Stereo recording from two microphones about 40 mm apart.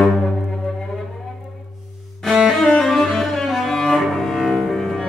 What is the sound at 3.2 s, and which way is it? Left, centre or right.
Cello, centre.